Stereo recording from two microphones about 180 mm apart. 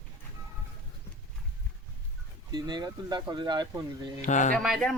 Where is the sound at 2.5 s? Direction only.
25° right (ahead or behind).